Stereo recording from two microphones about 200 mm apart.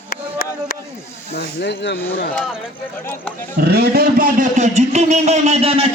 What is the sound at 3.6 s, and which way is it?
A man's voice, 50° right (ahead or behind).